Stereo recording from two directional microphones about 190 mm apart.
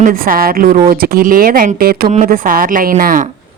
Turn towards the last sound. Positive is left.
turn(degrees=-45)  # may be behind; listen again after turning